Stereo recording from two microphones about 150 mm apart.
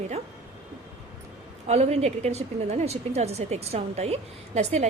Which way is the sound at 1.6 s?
45° right (ahead or behind).